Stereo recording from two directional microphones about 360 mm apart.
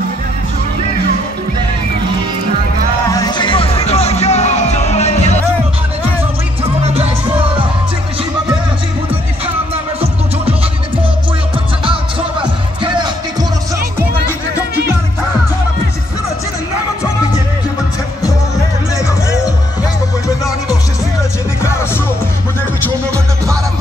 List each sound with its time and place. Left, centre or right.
3.1 s music: centre
11.8 s music: centre
21.6 s music: centre
23.1 s music: centre